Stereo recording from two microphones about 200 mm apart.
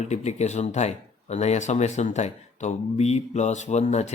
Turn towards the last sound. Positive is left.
turn(degrees=35)  # may be behind; listen again after turning